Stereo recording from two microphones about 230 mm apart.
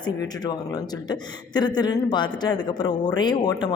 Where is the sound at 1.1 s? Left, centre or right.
Centre.